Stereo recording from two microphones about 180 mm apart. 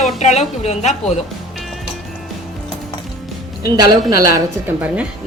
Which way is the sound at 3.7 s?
25° right (ahead or behind).